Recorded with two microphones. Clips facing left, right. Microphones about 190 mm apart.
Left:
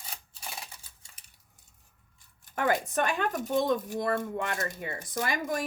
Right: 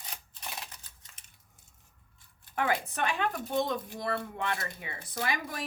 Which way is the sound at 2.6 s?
45° left (ahead or behind).